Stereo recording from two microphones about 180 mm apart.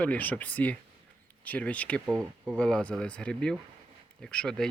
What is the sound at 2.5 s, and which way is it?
Speech, 5° left (ahead or behind).